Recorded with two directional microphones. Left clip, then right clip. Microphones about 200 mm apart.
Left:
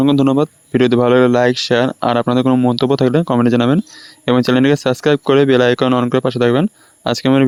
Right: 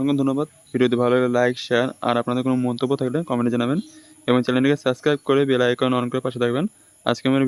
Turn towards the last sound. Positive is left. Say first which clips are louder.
# left 6 dB
turn(degrees=35)  # may be behind; listen again after turning